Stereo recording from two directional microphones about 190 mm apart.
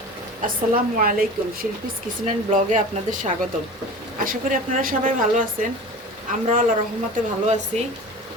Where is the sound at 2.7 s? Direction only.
40° right (ahead or behind).